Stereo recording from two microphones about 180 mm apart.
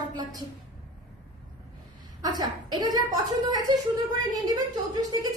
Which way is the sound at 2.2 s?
20° right (ahead or behind).